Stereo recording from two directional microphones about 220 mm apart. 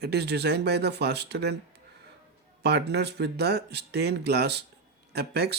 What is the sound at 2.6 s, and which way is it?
Speech, 50° right (ahead or behind).